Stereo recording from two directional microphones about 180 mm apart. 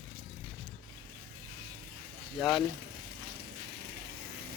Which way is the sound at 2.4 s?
Centre (ahead or behind).